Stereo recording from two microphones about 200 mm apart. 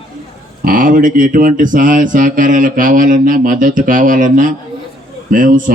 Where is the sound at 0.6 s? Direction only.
45° right (ahead or behind).